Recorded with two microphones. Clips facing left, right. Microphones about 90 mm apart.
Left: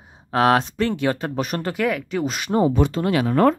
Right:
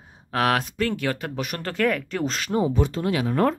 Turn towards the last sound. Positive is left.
turn(degrees=85)